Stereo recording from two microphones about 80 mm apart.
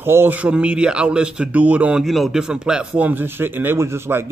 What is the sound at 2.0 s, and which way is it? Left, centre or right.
A man's voice, centre.